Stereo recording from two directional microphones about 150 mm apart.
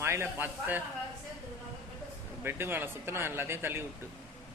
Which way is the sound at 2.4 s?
15° right (ahead or behind).